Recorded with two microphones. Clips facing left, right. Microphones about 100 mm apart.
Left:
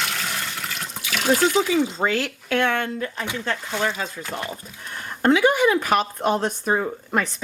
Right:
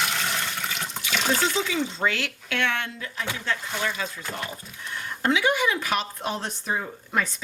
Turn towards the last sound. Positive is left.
turn(degrees=50)  # may be behind; listen again after turning